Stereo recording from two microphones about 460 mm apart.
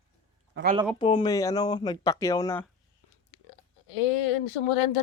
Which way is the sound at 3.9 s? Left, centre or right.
Left.